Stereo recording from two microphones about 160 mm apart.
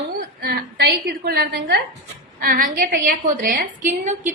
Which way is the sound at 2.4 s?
65° right (ahead or behind).